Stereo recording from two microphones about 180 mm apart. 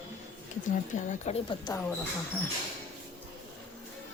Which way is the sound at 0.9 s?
45° left (ahead or behind).